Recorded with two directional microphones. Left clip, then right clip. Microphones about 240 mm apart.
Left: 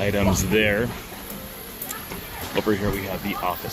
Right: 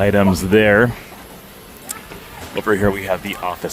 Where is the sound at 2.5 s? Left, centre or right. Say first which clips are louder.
Right 6 dB; right.